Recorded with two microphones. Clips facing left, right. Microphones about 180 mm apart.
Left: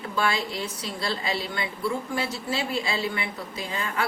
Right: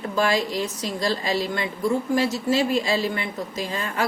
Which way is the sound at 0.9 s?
40° right (ahead or behind).